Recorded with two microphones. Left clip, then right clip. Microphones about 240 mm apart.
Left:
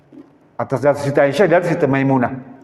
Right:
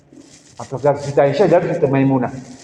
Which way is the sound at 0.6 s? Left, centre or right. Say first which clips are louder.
Left 2 dB; left.